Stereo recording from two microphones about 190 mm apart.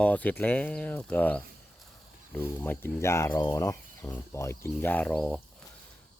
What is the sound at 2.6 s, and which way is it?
Speech, 10° left (ahead or behind).